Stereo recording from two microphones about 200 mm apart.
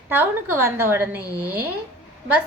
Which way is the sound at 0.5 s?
10° right (ahead or behind).